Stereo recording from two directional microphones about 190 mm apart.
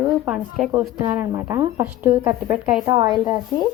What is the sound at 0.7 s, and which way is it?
A woman's voice, 15° right (ahead or behind).